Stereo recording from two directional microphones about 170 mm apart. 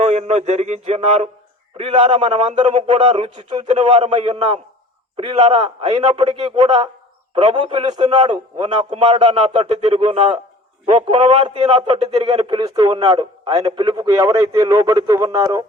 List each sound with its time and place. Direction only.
0.0 s a man's voice: 40° right (ahead or behind); by 15.6 s 20° right (ahead or behind)